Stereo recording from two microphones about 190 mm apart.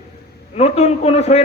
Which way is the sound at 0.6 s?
35° left (ahead or behind).